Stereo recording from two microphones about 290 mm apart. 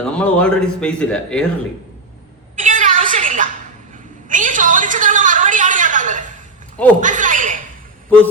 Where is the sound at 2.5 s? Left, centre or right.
Right.